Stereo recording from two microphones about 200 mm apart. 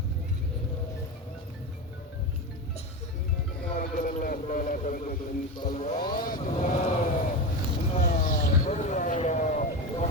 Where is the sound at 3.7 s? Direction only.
40° left (ahead or behind).